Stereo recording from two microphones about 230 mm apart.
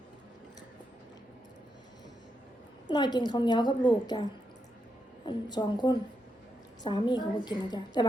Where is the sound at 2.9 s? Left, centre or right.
Centre.